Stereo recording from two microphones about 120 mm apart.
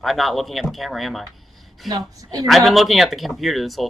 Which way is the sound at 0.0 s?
Centre (ahead or behind).